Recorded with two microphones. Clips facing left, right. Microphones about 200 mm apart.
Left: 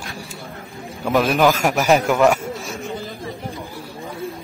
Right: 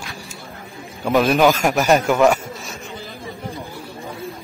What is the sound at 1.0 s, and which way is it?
A man's voice, centre (ahead or behind).